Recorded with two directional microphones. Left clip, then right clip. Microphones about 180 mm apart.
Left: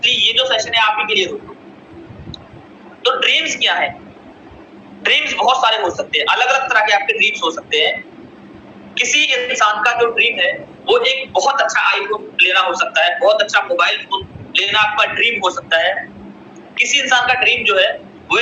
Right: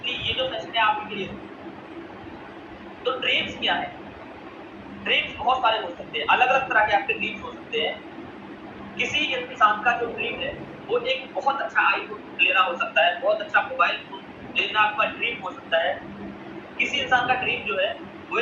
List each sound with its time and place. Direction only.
0.0 s a man's voice: 55° left (ahead or behind)
3.0 s a man's voice: 55° left (ahead or behind)
5.0 s a man's voice: 55° left (ahead or behind)
9.0 s a man's voice: 55° left (ahead or behind)